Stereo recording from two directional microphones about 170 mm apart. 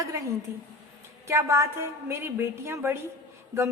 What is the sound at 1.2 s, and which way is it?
A woman's voice, 15° right (ahead or behind).